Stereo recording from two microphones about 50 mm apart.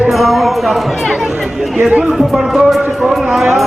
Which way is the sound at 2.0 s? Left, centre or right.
Centre.